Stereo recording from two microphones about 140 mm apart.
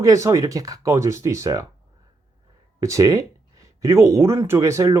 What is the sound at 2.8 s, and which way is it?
Speech, 25° right (ahead or behind).